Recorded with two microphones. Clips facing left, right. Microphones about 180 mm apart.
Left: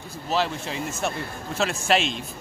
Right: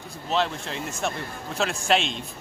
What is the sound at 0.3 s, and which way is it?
A man's voice, 5° left (ahead or behind).